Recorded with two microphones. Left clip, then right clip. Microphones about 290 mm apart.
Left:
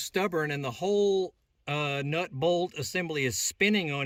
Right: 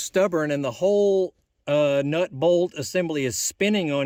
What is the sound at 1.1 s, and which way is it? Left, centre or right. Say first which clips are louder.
Speech: right 6 dB; right.